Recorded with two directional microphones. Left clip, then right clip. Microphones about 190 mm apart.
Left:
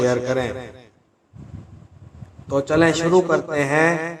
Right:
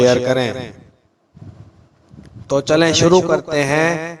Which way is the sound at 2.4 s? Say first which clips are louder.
Right 3 dB; 40° right (ahead or behind).